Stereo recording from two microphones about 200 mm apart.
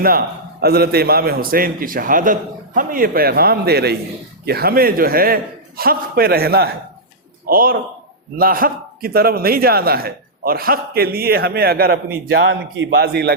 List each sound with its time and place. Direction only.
0.6 s a man's voice: 50° right (ahead or behind)